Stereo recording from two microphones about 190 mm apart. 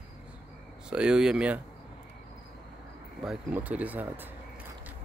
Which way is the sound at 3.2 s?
5° right (ahead or behind).